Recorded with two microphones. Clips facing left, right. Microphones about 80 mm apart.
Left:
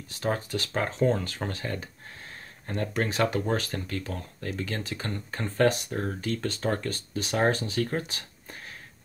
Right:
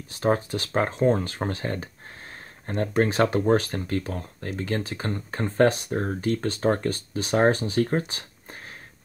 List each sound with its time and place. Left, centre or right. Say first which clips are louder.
0.2 s speech: right 5 dB; right